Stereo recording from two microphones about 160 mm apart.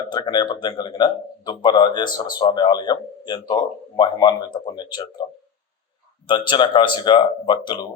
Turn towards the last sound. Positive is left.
turn(degrees=25)  # may be behind; listen again after turning